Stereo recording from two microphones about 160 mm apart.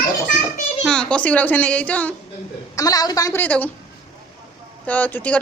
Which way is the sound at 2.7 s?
20° left (ahead or behind).